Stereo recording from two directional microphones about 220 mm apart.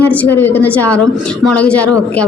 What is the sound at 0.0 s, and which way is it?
A woman's voice, 5° left (ahead or behind).